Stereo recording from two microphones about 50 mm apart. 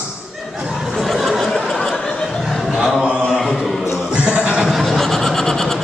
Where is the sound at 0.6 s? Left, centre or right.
Centre.